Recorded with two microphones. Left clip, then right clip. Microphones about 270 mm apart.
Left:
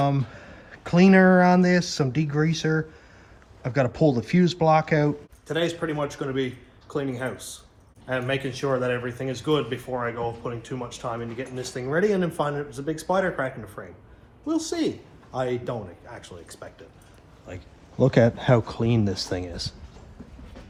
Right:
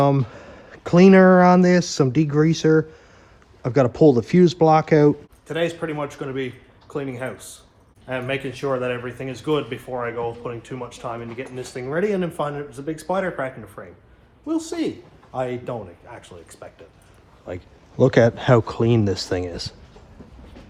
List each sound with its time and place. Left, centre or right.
0.3 s speech: right
5.5 s speech: centre
18.0 s speech: right